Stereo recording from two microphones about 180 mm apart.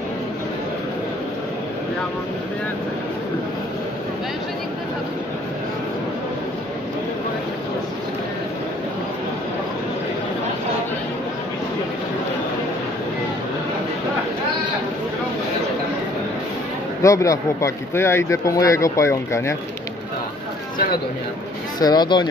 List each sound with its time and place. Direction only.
17.0 s speech: 15° left (ahead or behind)
21.7 s speech: 25° left (ahead or behind)